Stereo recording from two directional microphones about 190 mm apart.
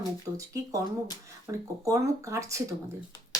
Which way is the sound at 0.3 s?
15° right (ahead or behind).